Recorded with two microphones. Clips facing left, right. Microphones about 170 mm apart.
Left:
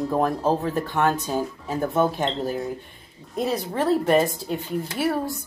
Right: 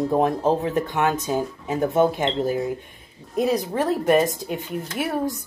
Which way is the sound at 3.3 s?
15° right (ahead or behind).